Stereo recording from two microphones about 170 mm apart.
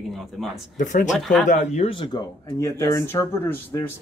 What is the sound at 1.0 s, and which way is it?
Speech, centre (ahead or behind).